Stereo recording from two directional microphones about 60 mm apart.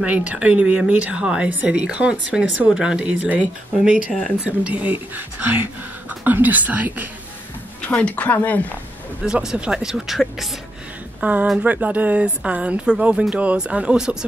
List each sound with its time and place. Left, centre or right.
0.0 s speech: right
7.8 s speech: left
9.2 s speech: centre
11.2 s speech: right